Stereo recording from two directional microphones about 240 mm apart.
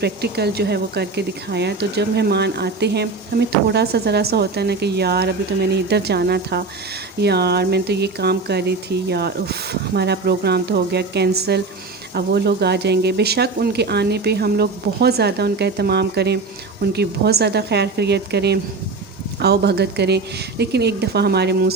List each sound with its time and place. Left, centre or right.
0.0 s speech: right